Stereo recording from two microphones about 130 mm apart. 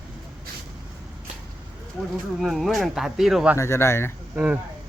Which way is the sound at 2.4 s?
Centre (ahead or behind).